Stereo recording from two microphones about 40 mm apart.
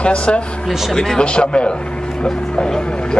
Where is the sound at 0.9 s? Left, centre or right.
Centre.